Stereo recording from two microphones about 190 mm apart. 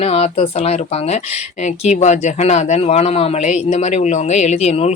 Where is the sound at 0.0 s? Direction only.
30° left (ahead or behind).